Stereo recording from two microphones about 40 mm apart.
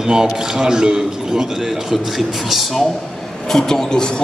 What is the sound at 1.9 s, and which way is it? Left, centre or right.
Speech, centre.